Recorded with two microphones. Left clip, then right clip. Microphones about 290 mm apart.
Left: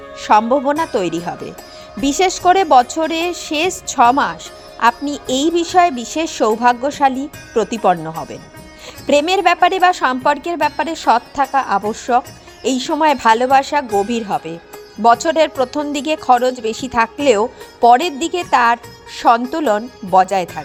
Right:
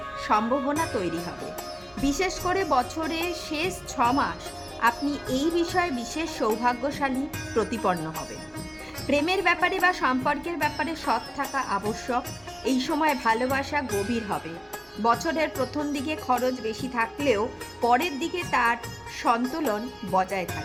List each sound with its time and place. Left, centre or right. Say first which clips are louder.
0.2 s a woman's voice: left 12 dB; left
13.8 s speech: left 11 dB; centre
15.0 s a woman's voice: left 12 dB; left